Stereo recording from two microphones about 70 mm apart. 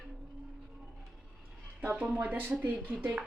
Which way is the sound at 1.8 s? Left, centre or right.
Right.